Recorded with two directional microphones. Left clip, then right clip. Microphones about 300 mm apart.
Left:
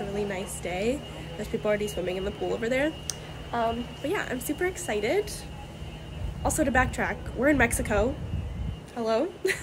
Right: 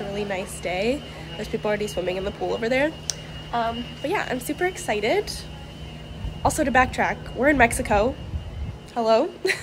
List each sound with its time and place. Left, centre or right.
0.1 s a woman's voice: centre
6.4 s a woman's voice: centre